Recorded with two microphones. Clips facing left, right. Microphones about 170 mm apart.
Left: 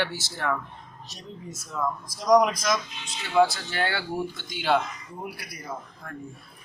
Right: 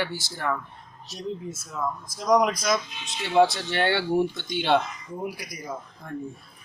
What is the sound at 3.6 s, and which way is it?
Speech, 20° right (ahead or behind).